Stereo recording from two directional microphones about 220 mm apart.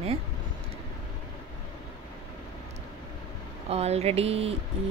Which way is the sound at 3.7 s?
30° right (ahead or behind).